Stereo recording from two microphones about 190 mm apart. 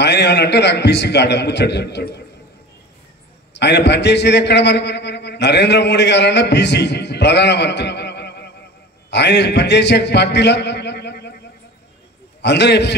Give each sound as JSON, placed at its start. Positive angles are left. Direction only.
{"t": 0.0, "sound": "a man's voice", "side_deg": 60}
{"t": 3.5, "sound": "a man's voice", "side_deg": 65}
{"t": 12.4, "sound": "a man's voice", "side_deg": 65}